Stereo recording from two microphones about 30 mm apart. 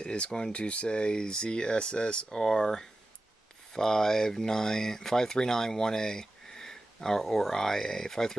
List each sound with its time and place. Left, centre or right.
0.0 s speech: left
2.3 s speech: centre